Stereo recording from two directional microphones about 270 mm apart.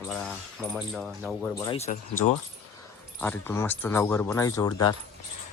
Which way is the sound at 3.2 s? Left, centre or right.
Centre.